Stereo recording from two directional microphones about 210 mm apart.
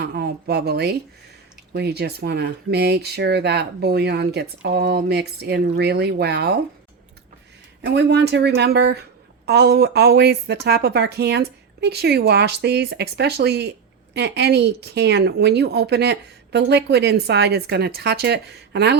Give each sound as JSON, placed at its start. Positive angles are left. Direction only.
{"t": 0.0, "sound": "a woman's voice", "side_deg": -50}
{"t": 7.8, "sound": "a woman's voice", "side_deg": -55}